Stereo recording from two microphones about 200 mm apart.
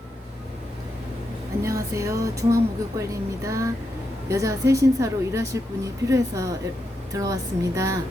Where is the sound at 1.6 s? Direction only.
15° right (ahead or behind).